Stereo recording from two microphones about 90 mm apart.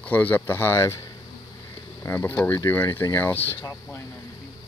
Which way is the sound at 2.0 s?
25° left (ahead or behind).